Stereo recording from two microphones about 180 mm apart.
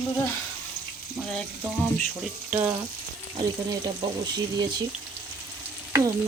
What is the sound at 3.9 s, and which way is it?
Speech, 25° right (ahead or behind).